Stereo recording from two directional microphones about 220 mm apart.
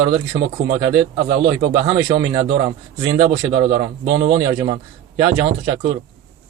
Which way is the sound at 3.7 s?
50° right (ahead or behind).